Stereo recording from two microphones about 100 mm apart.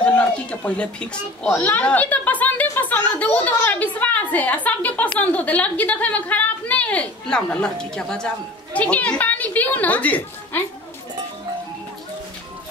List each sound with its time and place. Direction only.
0.0 s a woman's voice: 15° left (ahead or behind)